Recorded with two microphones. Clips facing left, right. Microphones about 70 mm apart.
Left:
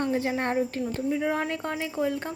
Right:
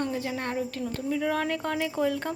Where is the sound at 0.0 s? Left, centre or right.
Left.